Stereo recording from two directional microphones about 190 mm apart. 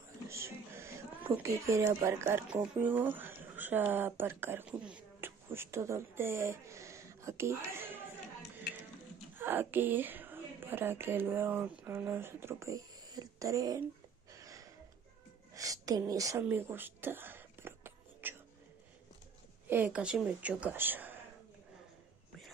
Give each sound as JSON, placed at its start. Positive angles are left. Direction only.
{"t": 0.3, "sound": "a sound", "side_deg": -15}
{"t": 1.3, "sound": "a woman's voice", "side_deg": -15}
{"t": 9.4, "sound": "a woman's voice", "side_deg": -10}
{"t": 14.3, "sound": "a sound", "side_deg": -15}
{"t": 15.5, "sound": "whispering", "side_deg": -20}
{"t": 19.7, "sound": "a woman's voice", "side_deg": -10}